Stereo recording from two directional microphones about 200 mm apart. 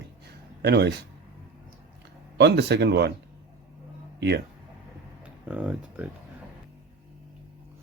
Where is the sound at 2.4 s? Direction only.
55° right (ahead or behind).